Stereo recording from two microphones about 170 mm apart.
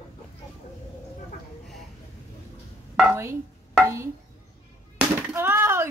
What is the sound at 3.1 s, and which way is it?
Speech, 15° right (ahead or behind).